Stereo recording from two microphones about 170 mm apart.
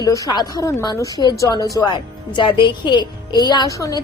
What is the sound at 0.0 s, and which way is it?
A woman's voice, 20° left (ahead or behind).